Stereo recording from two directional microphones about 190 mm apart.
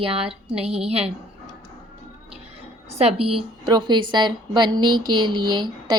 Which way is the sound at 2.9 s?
35° right (ahead or behind).